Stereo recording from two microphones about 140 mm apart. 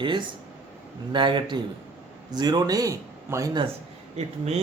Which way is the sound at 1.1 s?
35° right (ahead or behind).